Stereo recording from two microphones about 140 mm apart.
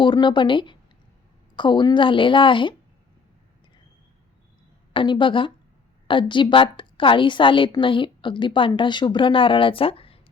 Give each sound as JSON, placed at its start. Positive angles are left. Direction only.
{"t": 0.0, "sound": "a woman's voice", "side_deg": 35}
{"t": 4.9, "sound": "a woman's voice", "side_deg": 35}